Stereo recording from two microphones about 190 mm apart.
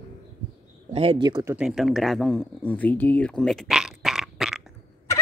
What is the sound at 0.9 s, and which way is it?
Speech, 30° right (ahead or behind).